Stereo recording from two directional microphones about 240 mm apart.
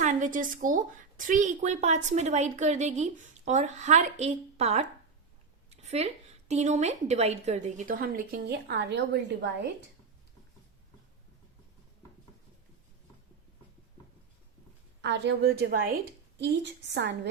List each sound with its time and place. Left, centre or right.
0.0 s speech: right
5.7 s a sound: right
6.5 s a woman's voice: right
15.0 s a woman's voice: right